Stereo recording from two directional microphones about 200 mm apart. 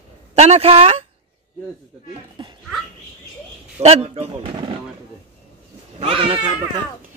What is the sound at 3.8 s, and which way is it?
Speech, 30° right (ahead or behind).